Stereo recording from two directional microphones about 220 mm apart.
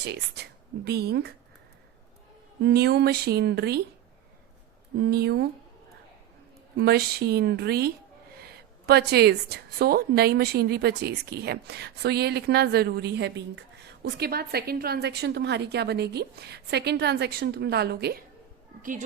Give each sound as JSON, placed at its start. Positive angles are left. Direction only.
{"t": 0.0, "sound": "a woman's voice", "side_deg": -50}
{"t": 2.6, "sound": "a woman's voice", "side_deg": -50}
{"t": 4.9, "sound": "a woman's voice", "side_deg": -50}
{"t": 6.7, "sound": "a woman's voice", "side_deg": -45}
{"t": 18.8, "sound": "a woman's voice", "side_deg": -35}